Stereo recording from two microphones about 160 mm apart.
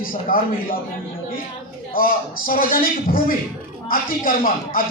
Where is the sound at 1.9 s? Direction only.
65° left (ahead or behind).